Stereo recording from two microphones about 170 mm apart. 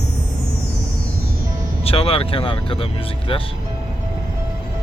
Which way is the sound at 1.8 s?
35° left (ahead or behind).